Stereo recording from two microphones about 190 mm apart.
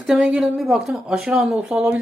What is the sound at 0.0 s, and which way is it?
A woman's voice, centre (ahead or behind).